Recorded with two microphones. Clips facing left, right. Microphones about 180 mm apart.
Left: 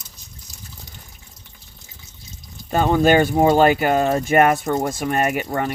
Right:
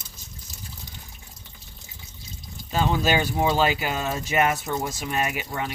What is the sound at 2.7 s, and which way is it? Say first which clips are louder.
Speech: left 7 dB; 55° left (ahead or behind).